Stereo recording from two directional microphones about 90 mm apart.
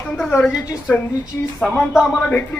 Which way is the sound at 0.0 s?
15° left (ahead or behind).